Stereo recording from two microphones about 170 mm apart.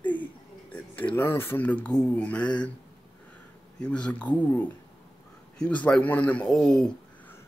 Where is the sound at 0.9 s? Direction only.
10° left (ahead or behind).